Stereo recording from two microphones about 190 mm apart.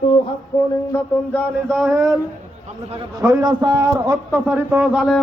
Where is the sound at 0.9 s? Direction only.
5° left (ahead or behind).